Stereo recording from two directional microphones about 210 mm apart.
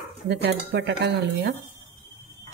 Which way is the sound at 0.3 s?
50° right (ahead or behind).